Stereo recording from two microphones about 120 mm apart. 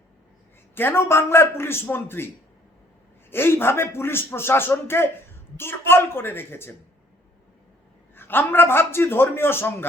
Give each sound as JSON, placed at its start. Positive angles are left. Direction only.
{"t": 0.8, "sound": "a man's voice", "side_deg": 20}
{"t": 8.1, "sound": "a man's voice", "side_deg": 15}